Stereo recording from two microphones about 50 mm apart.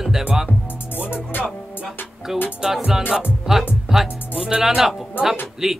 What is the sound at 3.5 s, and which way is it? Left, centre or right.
Speech, centre.